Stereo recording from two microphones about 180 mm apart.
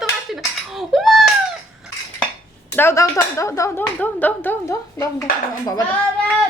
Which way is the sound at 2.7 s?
15° left (ahead or behind).